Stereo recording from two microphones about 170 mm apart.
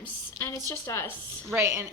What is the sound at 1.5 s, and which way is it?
Speech, 15° right (ahead or behind).